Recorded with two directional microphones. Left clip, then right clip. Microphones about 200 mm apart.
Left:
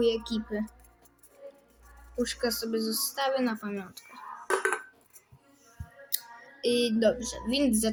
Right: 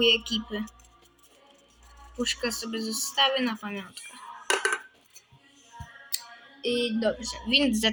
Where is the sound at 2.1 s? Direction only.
15° left (ahead or behind).